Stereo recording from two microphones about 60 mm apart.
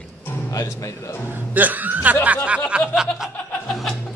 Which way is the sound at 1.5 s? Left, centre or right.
Right.